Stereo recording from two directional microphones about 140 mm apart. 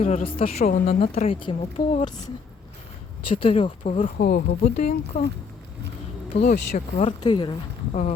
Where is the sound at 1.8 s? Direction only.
90° left.